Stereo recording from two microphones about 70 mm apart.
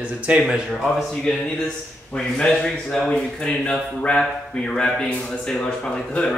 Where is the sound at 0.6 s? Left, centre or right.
Centre.